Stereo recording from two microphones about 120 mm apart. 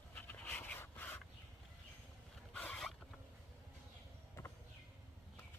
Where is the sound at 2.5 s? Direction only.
10° left (ahead or behind).